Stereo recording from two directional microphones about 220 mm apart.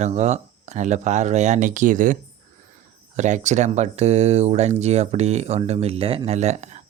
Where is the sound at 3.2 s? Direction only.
35° right (ahead or behind).